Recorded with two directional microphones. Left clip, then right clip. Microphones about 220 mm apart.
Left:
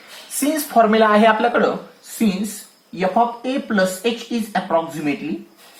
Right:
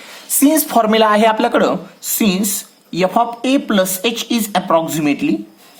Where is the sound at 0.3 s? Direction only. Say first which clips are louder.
Right 3 dB; 40° right (ahead or behind).